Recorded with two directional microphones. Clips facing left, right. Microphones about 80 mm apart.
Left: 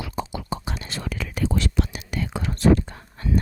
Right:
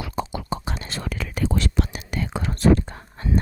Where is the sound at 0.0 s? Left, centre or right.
Right.